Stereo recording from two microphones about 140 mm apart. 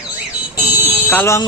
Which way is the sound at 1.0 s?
15° left (ahead or behind).